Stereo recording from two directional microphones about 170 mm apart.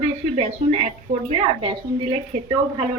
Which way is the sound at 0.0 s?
45° right (ahead or behind).